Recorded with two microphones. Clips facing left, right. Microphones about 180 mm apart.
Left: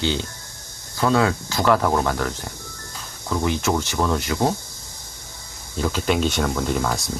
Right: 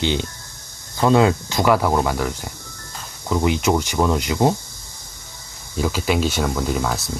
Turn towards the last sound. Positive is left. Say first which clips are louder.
# right 1 dB
turn(degrees=0)  # may be behind; listen again after turning